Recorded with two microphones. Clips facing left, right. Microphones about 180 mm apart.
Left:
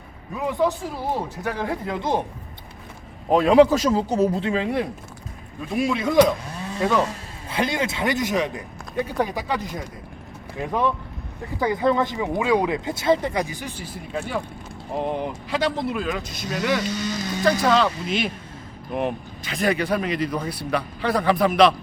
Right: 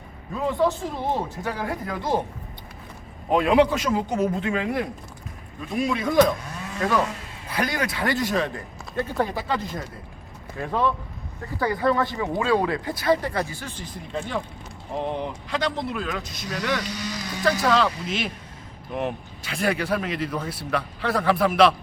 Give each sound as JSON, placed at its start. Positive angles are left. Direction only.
{"t": 0.3, "sound": "speech", "side_deg": 15}
{"t": 1.5, "sound": "speech", "side_deg": 20}
{"t": 3.2, "sound": "a man's voice", "side_deg": 35}
{"t": 5.7, "sound": "speech", "side_deg": 5}
{"t": 6.4, "sound": "a sound", "side_deg": 30}
{"t": 7.5, "sound": "speech", "side_deg": 25}
{"t": 16.8, "sound": "a sound", "side_deg": 25}
{"t": 17.6, "sound": "speech", "side_deg": 0}